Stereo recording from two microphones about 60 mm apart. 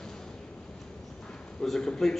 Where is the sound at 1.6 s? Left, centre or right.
Centre.